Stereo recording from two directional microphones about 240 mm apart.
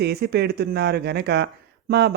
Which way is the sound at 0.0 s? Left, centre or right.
Right.